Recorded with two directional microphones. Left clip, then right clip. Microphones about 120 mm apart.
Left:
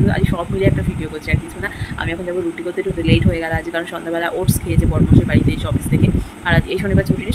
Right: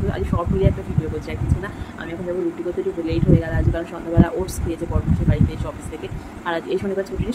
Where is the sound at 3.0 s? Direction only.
Centre (ahead or behind).